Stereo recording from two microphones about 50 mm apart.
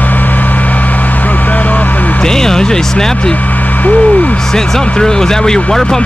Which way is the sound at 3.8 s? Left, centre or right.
Left.